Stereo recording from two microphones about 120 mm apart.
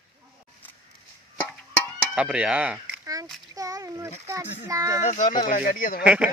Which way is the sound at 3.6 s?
30° right (ahead or behind).